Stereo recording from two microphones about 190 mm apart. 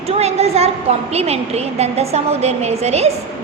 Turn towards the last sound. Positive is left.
turn(degrees=-35)  # may be behind; listen again after turning